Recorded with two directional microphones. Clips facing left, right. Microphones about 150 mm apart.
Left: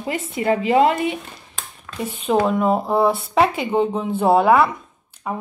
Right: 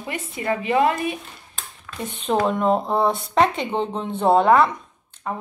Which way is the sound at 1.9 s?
5° left (ahead or behind).